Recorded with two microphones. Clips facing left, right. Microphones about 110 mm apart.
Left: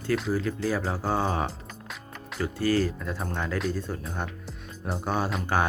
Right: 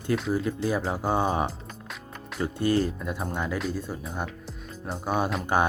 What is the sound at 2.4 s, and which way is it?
Speech, 20° right (ahead or behind).